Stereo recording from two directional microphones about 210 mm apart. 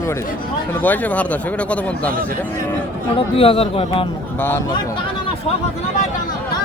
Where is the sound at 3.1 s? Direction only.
25° left (ahead or behind).